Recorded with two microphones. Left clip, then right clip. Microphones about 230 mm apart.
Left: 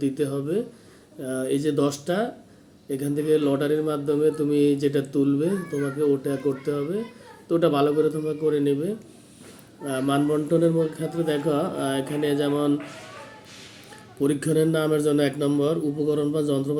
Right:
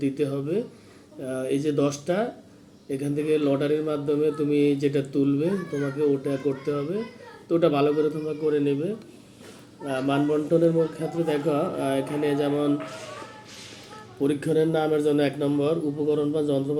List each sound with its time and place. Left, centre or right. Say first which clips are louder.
0.0 s a man's voice: left 1 dB; centre
14.3 s a man's voice: left 1 dB; left